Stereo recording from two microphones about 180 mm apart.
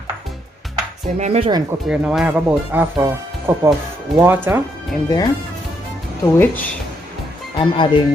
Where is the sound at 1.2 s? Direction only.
35° right (ahead or behind).